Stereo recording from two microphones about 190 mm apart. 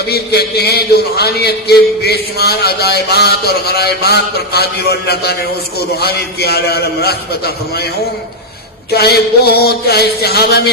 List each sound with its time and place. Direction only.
0.1 s a man's voice: 55° left (ahead or behind)
8.9 s a man's voice: 55° left (ahead or behind)